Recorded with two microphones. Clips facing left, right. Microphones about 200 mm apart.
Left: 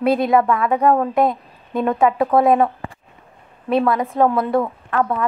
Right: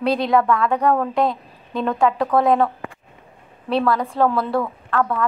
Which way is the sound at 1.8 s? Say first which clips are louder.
Left 2 dB; 15° left (ahead or behind).